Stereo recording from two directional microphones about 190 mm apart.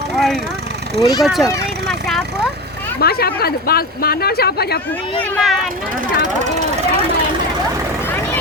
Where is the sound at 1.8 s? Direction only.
Centre (ahead or behind).